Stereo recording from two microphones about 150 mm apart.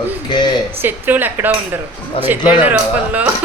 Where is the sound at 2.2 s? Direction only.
35° left (ahead or behind).